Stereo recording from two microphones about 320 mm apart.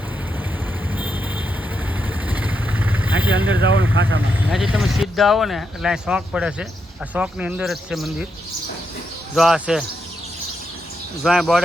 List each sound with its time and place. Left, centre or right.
0.9 s vehicle: centre
3.9 s speech: right
4.4 s speech: centre
9.3 s speech: centre
11.2 s speech: centre